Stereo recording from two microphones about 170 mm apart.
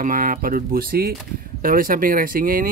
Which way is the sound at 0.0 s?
55° right (ahead or behind).